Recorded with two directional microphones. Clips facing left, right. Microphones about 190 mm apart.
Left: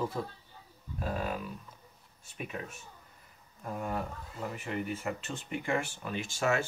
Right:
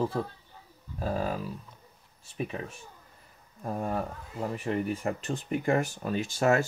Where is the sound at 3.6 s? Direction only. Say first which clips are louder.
Right 4 dB; 35° right (ahead or behind).